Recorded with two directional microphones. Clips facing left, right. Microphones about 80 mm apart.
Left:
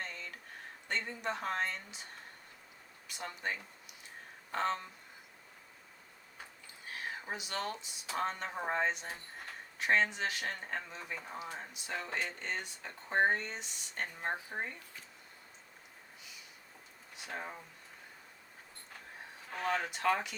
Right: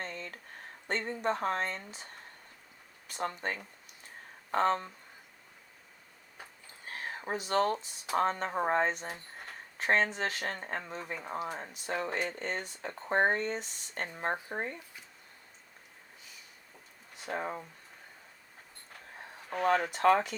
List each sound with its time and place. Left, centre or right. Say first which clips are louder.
0.0 s a sound: right 3 dB; right
0.9 s speech: right 5 dB; right
3.1 s speech: right 5 dB; right
6.9 s speech: right 4 dB; right
17.2 s speech: right 7 dB; right
19.6 s speech: right 7 dB; right